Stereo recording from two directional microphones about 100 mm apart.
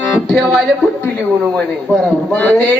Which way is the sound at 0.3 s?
5° left (ahead or behind).